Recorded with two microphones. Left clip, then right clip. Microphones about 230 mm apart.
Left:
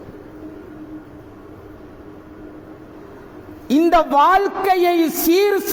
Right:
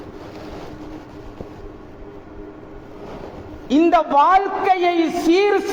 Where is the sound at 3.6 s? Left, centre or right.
Left.